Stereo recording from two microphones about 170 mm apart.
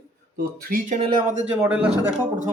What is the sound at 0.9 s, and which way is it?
Speech, 40° right (ahead or behind).